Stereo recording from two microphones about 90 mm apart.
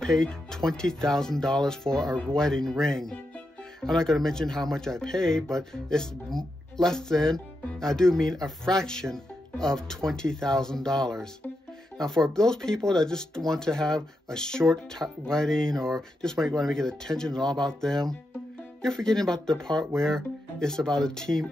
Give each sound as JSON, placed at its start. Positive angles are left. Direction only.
{"t": 0.0, "sound": "speech", "side_deg": 5}